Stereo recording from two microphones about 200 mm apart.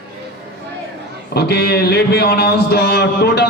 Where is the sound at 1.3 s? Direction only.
55° left (ahead or behind).